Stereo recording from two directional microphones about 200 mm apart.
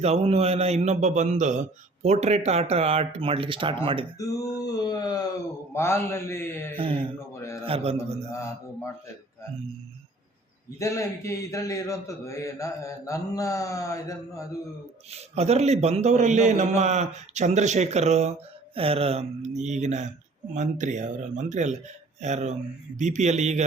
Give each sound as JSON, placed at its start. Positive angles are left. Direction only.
{"t": 0.0, "sound": "a man's voice", "side_deg": -30}
{"t": 4.2, "sound": "a sound", "side_deg": 20}
{"t": 5.7, "sound": "a man's voice", "side_deg": 15}
{"t": 6.7, "sound": "a man's voice", "side_deg": -25}
{"t": 7.3, "sound": "a man's voice", "side_deg": 15}
{"t": 7.6, "sound": "a man's voice", "side_deg": -30}
{"t": 8.3, "sound": "a man's voice", "side_deg": 15}
{"t": 10.8, "sound": "a man's voice", "side_deg": 15}
{"t": 15.1, "sound": "a man's voice", "side_deg": -30}